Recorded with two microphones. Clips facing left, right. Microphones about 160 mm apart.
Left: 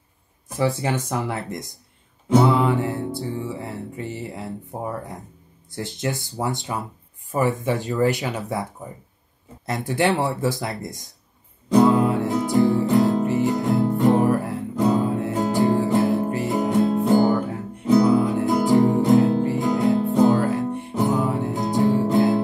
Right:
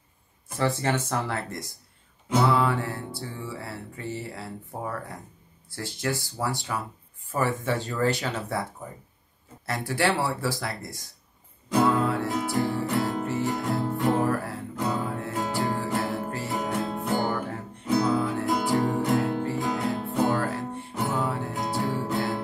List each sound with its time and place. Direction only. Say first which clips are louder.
0.5 s speech: left 3 dB; 10° left (ahead or behind)
9.7 s speech: left 4 dB; 20° left (ahead or behind)
11.8 s music: left 5 dB; 15° left (ahead or behind)